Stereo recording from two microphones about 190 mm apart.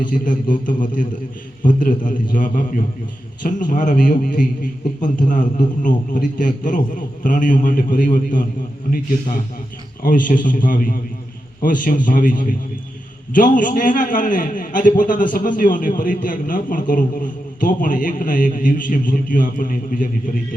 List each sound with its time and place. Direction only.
0.0 s a man's voice: 45° left (ahead or behind)
10.0 s a man's voice: 45° left (ahead or behind)